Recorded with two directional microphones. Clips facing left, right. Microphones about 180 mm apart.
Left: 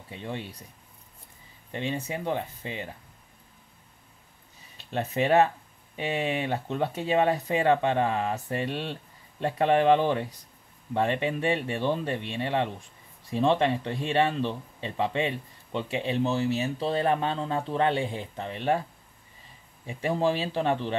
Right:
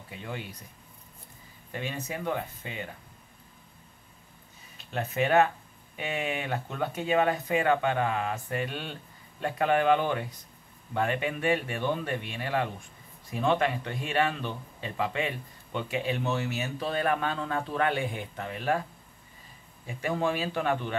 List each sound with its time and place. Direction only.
0.1 s speech: 30° left (ahead or behind)
1.7 s speech: 30° left (ahead or behind)
4.7 s speech: 30° left (ahead or behind)
19.9 s speech: 30° left (ahead or behind)